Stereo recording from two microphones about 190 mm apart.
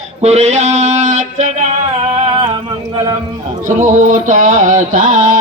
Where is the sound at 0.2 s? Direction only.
35° right (ahead or behind).